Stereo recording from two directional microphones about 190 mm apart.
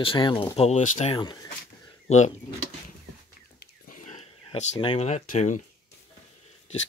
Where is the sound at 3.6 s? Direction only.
45° left (ahead or behind).